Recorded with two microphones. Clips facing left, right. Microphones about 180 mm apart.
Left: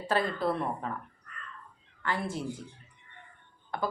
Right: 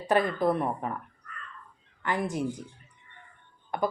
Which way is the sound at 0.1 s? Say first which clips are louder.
Right 4 dB; 15° right (ahead or behind).